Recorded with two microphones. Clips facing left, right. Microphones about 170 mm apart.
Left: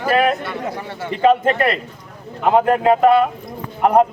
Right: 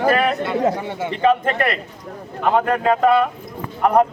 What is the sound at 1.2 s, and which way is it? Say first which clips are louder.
A man's voice: left 3 dB; 25° left (ahead or behind).